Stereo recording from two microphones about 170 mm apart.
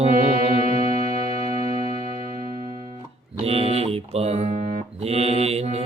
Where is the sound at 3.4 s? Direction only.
35° right (ahead or behind).